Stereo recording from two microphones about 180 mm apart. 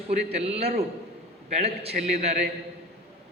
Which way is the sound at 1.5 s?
35° right (ahead or behind).